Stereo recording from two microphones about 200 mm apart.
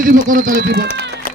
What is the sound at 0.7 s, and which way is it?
Speech, 60° right (ahead or behind).